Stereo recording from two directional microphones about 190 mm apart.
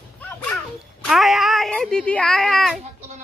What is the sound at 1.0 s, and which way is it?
Speech, centre (ahead or behind).